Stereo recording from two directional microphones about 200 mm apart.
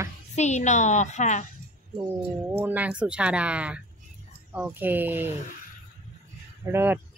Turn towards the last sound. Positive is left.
turn(degrees=-10)  # may be behind; listen again after turning